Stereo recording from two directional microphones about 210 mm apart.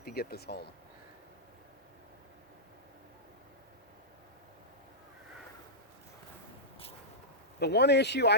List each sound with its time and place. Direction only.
0.0 s speech: 45° left (ahead or behind)
7.6 s speech: 50° left (ahead or behind)